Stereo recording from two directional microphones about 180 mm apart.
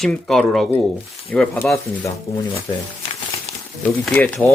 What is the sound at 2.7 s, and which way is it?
Speech, 25° left (ahead or behind).